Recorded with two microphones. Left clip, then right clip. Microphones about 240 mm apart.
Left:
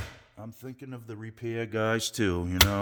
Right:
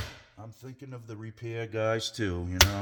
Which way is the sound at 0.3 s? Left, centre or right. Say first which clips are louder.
Left 4 dB; left.